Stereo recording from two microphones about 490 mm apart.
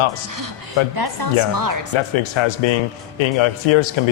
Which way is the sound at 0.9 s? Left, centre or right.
Right.